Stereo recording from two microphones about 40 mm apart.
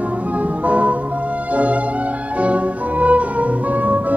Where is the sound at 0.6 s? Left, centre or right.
Right.